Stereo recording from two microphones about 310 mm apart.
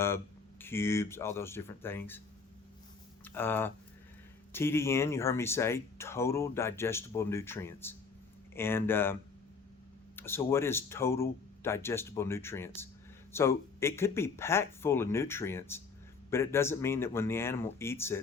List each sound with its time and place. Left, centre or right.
0.6 s speech: centre
3.2 s speech: centre
10.2 s speech: centre